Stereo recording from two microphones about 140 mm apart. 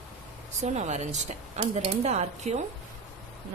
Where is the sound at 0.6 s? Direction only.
55° right (ahead or behind).